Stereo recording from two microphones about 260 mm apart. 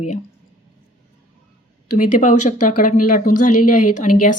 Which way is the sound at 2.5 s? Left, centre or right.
Left.